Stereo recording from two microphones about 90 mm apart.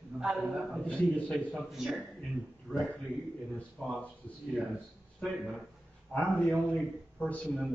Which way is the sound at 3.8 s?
15° left (ahead or behind).